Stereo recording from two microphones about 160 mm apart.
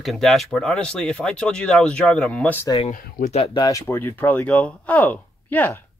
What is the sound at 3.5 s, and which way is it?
Speech, 20° left (ahead or behind).